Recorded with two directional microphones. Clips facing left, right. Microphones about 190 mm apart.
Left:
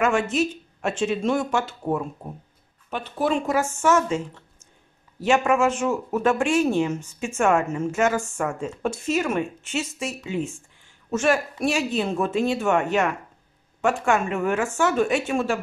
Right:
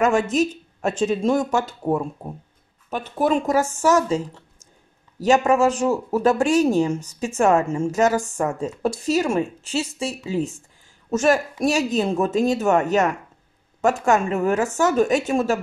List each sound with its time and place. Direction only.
0.0 s a woman's voice: 40° right (ahead or behind)